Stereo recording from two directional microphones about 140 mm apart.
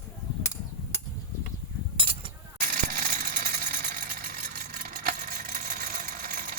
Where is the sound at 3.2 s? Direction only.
75° right (ahead or behind).